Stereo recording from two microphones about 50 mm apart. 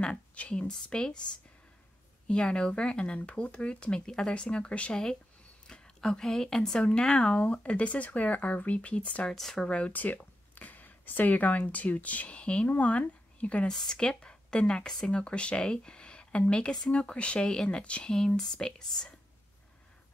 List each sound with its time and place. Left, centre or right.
0.0 s speech: left
2.2 s speech: centre
5.7 s a woman's voice: centre
7.3 s speech: left
9.3 s speech: centre
9.7 s speech: left
9.9 s a woman's voice: left
13.7 s a woman's voice: centre